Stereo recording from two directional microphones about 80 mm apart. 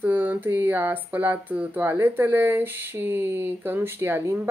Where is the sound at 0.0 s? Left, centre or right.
Right.